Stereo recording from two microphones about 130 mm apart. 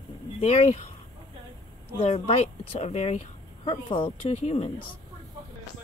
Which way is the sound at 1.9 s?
50° left (ahead or behind).